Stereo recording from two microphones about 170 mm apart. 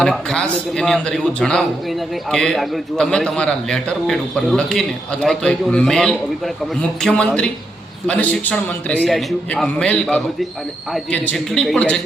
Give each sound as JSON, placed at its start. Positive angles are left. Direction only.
{"t": 0.0, "sound": "a man's voice", "side_deg": 5}